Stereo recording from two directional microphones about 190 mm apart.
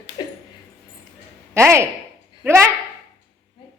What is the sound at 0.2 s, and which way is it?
Dog, 25° left (ahead or behind).